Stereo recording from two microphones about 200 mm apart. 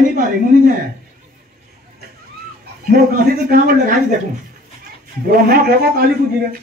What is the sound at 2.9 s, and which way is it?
A man's voice, 45° right (ahead or behind).